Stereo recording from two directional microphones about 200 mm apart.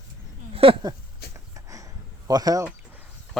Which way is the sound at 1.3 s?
15° right (ahead or behind).